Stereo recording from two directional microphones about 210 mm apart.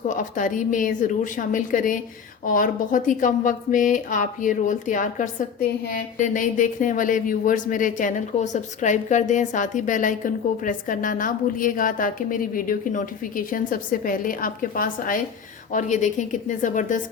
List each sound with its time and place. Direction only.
0.1 s speech: 40° left (ahead or behind)